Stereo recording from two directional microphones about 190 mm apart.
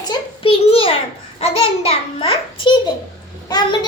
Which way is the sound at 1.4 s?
30° left (ahead or behind).